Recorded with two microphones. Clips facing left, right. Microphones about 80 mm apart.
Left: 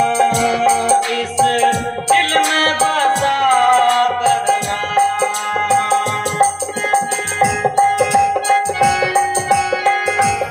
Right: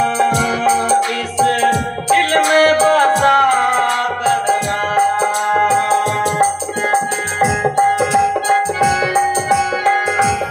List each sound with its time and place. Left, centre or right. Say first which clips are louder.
0.0 s music: left 1 dB; right